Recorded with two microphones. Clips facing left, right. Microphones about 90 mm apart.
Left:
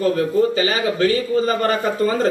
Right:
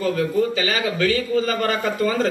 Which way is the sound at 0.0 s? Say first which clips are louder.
Left 3 dB; 35° left (ahead or behind).